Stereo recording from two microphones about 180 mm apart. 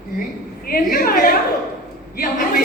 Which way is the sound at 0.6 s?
55° left (ahead or behind).